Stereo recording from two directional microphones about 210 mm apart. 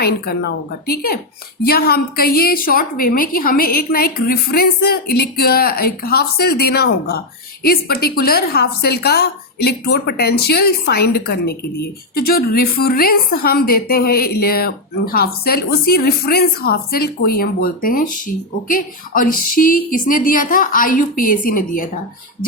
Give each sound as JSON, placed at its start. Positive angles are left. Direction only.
{"t": 0.0, "sound": "a woman's voice", "side_deg": 50}